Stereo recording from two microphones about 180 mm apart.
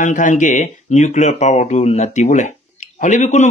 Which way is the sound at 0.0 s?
45° left (ahead or behind).